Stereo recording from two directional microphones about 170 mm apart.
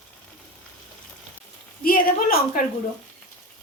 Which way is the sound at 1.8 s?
55° left (ahead or behind).